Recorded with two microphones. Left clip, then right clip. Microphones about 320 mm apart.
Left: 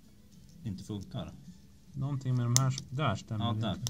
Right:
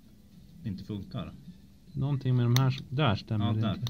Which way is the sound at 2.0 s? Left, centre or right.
Centre.